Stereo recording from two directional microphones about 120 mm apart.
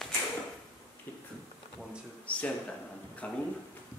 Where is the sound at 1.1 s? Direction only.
15° left (ahead or behind).